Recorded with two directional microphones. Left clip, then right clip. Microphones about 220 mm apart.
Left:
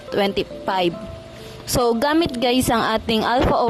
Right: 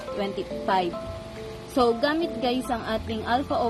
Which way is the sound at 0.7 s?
50° left (ahead or behind).